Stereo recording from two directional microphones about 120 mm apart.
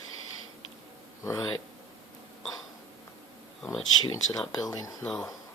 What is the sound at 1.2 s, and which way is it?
Speech, 25° left (ahead or behind).